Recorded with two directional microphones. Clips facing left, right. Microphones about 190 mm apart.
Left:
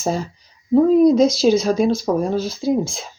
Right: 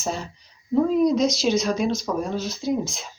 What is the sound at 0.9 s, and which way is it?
Speech, 35° left (ahead or behind).